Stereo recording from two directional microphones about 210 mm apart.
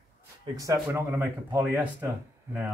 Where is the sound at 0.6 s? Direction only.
15° right (ahead or behind).